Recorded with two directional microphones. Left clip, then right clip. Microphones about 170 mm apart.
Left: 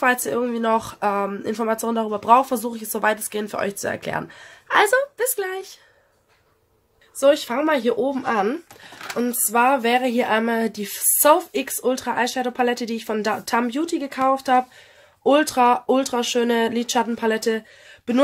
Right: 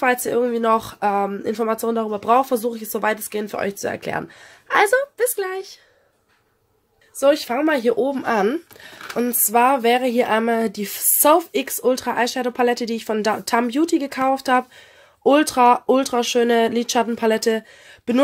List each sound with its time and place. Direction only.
0.0 s speech: 20° right (ahead or behind)
7.2 s speech: 30° right (ahead or behind)